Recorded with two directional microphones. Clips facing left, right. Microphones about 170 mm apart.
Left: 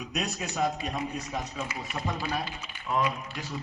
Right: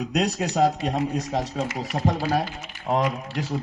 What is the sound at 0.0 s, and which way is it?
A man's voice, 80° right.